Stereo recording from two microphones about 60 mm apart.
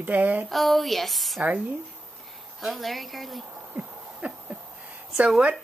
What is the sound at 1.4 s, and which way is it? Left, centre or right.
Speech, right.